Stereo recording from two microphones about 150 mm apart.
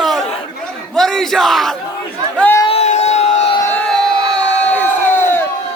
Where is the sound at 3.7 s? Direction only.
10° left (ahead or behind).